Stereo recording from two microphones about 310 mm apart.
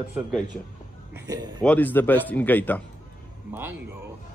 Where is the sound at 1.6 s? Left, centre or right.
Centre.